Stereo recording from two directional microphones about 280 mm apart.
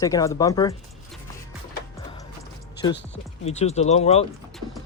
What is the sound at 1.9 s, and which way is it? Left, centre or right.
Music, centre.